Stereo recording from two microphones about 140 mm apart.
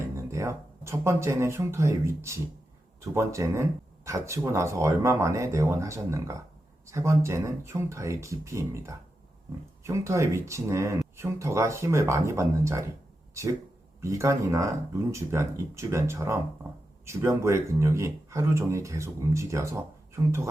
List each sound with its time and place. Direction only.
0.2 s speech: 20° right (ahead or behind)